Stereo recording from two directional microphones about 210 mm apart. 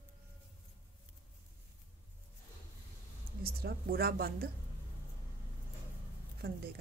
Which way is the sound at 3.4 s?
45° right (ahead or behind).